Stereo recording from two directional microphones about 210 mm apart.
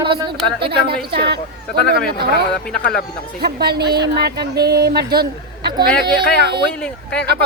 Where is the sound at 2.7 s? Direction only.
45° left (ahead or behind).